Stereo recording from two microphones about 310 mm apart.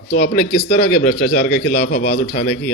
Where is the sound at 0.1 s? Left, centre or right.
Left.